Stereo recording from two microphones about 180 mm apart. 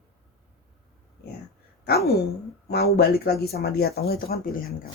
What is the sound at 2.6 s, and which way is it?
Speech, 60° left (ahead or behind).